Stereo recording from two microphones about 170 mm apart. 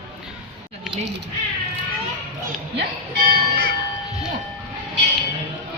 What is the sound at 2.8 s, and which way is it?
Speech, 90° right.